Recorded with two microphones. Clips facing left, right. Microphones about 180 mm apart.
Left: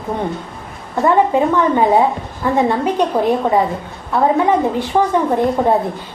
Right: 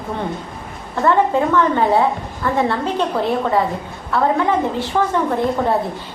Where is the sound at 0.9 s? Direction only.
15° left (ahead or behind).